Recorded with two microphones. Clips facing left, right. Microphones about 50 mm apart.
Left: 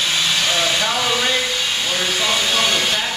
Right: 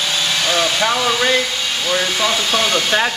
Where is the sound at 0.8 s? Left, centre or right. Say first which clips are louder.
Right 3 dB; right.